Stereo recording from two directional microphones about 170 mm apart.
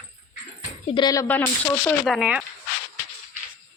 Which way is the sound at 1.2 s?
10° left (ahead or behind).